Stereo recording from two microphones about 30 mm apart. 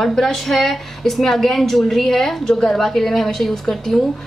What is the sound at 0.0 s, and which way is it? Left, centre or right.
A woman's voice, centre.